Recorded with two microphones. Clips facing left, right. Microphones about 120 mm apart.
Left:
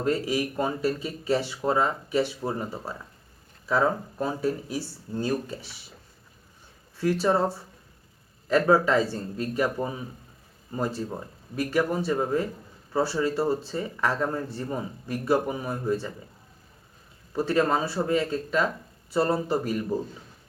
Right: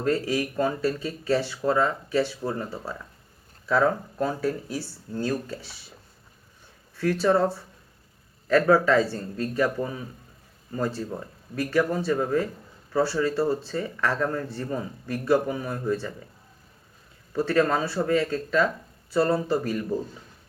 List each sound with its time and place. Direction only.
0.0 s speech: 15° left (ahead or behind)
3.7 s speech: 20° left (ahead or behind)
7.2 s speech: 20° left (ahead or behind)
8.4 s speech: 20° left (ahead or behind)
17.3 s speech: 20° left (ahead or behind)